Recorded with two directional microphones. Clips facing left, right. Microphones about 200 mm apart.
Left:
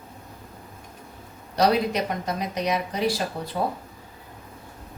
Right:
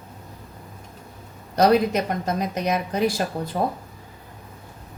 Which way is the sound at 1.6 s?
50° right (ahead or behind).